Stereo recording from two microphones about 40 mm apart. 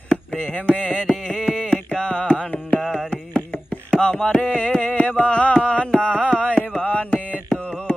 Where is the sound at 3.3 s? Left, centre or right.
Left.